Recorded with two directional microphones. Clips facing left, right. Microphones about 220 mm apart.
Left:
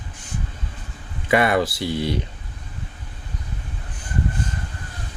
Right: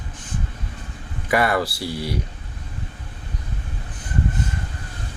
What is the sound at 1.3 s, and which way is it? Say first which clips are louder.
Speech: left 2 dB; 20° left (ahead or behind).